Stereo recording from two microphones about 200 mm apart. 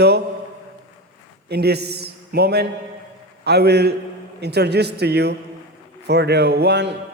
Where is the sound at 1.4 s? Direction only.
55° right (ahead or behind).